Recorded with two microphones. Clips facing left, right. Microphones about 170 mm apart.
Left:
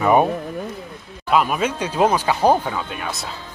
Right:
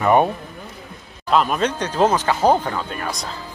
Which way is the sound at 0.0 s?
5° left (ahead or behind).